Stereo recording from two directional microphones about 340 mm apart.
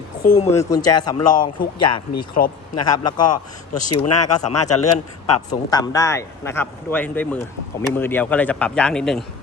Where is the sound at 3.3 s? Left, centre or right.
Left.